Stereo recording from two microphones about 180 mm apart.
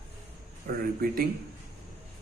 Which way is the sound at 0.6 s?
55° right (ahead or behind).